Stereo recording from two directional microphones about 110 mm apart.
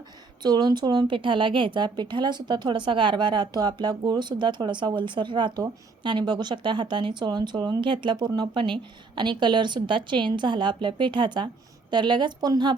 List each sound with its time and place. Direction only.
0.4 s a woman's voice: 40° right (ahead or behind)